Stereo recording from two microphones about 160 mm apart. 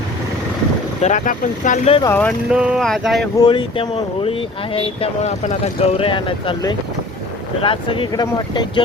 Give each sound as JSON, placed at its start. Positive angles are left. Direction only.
{"t": 1.0, "sound": "speech", "side_deg": 55}
{"t": 2.0, "sound": "speech", "side_deg": 10}
{"t": 2.5, "sound": "speech", "side_deg": -5}
{"t": 3.4, "sound": "speech", "side_deg": 30}